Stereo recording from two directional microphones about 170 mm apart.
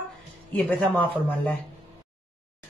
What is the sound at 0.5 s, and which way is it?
A man's voice, 5° left (ahead or behind).